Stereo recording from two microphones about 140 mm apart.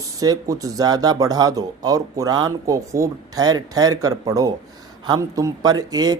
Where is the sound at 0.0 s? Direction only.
25° right (ahead or behind).